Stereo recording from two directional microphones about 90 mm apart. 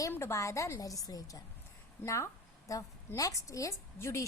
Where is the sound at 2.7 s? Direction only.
40° left (ahead or behind).